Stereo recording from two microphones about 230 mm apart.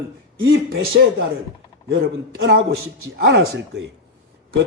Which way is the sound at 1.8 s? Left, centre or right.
Right.